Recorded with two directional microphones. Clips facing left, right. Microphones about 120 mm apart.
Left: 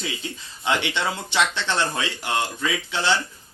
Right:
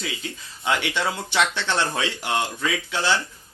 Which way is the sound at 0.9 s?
5° right (ahead or behind).